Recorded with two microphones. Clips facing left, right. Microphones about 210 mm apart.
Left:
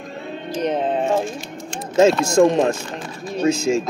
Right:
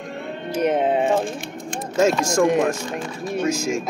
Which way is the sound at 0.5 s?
10° right (ahead or behind).